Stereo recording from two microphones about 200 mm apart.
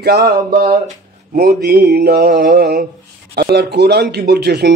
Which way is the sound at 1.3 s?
50° right (ahead or behind).